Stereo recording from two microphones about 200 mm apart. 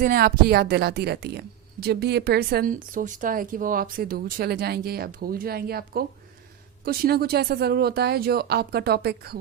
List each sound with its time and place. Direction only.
0.0 s speech: 45° right (ahead or behind)